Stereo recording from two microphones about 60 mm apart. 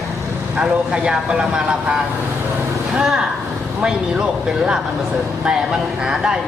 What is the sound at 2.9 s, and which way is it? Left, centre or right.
Speech, centre.